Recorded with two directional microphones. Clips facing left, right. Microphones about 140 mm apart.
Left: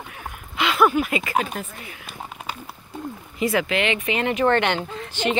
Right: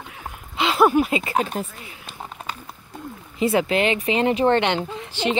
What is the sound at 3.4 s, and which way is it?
Speech, 30° right (ahead or behind).